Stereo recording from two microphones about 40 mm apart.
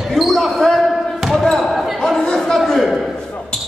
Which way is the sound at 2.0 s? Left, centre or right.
Centre.